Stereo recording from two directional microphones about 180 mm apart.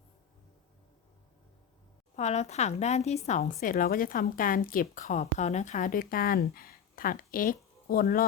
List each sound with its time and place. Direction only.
2.1 s a woman's voice: 40° left (ahead or behind); by 8.2 s 55° left (ahead or behind)